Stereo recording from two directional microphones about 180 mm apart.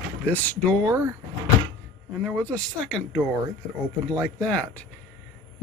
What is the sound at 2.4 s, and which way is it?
Speech, 5° left (ahead or behind).